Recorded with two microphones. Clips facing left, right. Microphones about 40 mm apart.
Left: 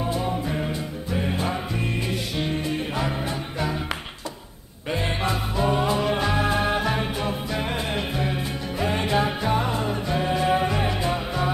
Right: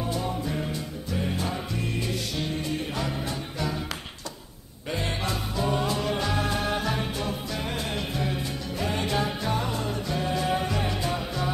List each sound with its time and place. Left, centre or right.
0.0 s music: left
4.9 s music: left